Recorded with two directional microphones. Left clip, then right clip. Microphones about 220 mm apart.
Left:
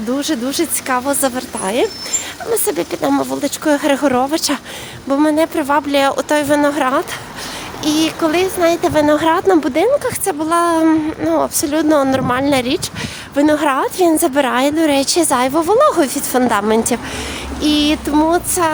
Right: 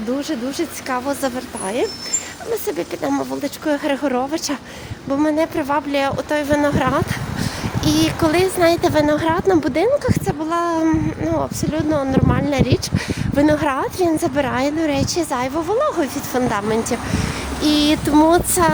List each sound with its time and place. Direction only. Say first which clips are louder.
0.1 s speech: left 5 dB; 30° left (ahead or behind)
7.9 s speech: left 2 dB; 10° left (ahead or behind); by 12.8 s 25° left (ahead or behind)
13.3 s speech: left 3 dB; 15° left (ahead or behind)
17.6 s speech: left 2 dB; 10° left (ahead or behind)